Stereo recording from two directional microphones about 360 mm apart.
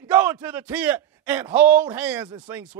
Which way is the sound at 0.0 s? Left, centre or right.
Centre.